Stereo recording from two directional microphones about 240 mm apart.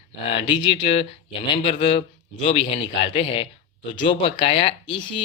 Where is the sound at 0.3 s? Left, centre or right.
Left.